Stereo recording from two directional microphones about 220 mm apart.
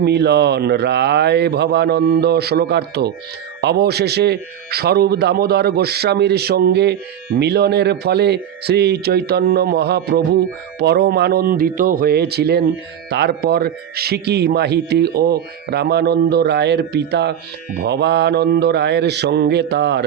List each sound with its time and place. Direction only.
0.0 s a man's voice: 50° right (ahead or behind)